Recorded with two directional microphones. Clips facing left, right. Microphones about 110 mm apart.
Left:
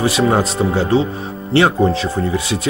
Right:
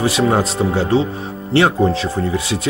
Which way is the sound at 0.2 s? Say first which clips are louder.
Left 1 dB; 20° left (ahead or behind).